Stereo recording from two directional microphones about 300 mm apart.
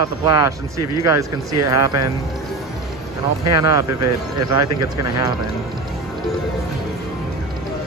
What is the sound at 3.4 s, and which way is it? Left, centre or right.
Speech, right.